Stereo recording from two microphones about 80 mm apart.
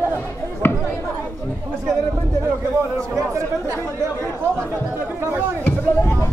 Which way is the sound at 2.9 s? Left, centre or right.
Right.